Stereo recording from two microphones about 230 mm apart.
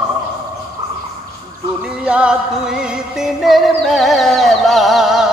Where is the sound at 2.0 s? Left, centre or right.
Centre.